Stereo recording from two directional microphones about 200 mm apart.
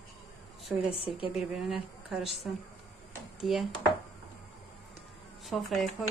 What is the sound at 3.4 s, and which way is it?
Speech, centre (ahead or behind).